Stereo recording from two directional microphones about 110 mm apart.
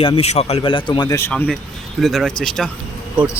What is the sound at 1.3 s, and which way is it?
Speech, 10° left (ahead or behind).